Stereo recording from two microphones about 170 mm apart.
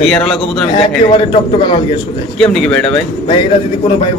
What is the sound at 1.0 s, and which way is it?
Speech, 30° left (ahead or behind).